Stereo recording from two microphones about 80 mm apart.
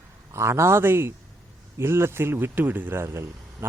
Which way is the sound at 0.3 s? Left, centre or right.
Right.